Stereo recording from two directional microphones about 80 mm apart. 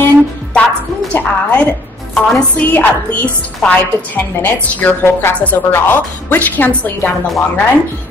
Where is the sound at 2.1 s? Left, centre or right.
Left.